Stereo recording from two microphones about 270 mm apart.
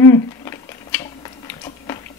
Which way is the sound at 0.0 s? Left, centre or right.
Centre.